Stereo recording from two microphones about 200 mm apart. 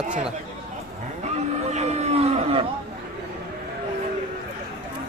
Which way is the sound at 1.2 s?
35° right (ahead or behind).